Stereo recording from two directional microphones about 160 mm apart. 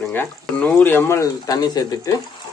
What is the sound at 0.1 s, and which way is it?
Speech, 10° left (ahead or behind).